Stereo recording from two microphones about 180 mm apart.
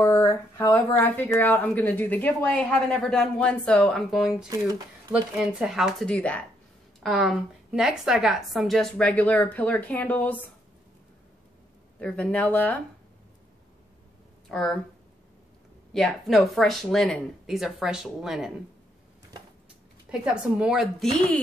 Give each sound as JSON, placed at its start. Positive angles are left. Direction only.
{"t": 0.0, "sound": "speech", "side_deg": 15}
{"t": 4.5, "sound": "speech", "side_deg": -20}
{"t": 5.1, "sound": "a woman's voice", "side_deg": -5}
{"t": 12.0, "sound": "speech", "side_deg": 5}
{"t": 14.5, "sound": "speech", "side_deg": 0}
{"t": 15.9, "sound": "a woman's voice", "side_deg": 0}
{"t": 20.1, "sound": "a woman's voice", "side_deg": -5}